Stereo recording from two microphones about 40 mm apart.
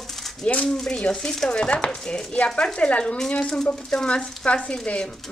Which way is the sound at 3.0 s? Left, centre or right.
Centre.